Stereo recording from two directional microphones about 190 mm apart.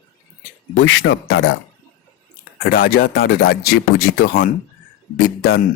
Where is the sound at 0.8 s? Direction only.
90° left.